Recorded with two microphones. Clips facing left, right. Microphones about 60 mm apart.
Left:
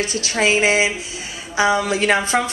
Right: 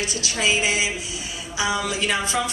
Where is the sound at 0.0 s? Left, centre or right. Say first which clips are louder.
Left 5 dB; left.